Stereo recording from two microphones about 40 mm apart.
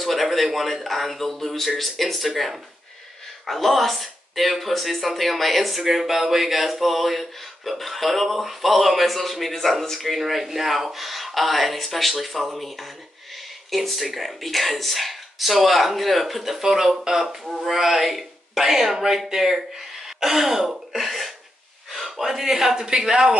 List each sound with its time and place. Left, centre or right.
0.0 s speech: centre
20.2 s throat clearing: centre
21.9 s speech: centre